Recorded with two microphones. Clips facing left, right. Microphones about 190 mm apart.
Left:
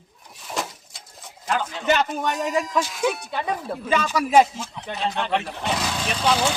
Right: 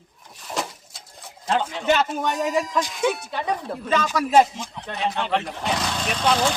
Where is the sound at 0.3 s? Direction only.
Centre (ahead or behind).